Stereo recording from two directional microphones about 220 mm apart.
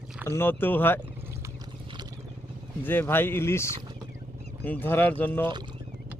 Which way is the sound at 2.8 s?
10° left (ahead or behind).